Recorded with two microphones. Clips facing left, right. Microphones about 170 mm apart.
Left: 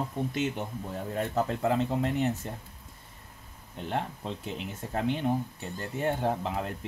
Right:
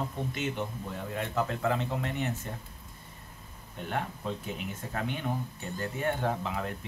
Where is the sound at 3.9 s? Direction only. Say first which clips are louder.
Left 1 dB; 30° left (ahead or behind).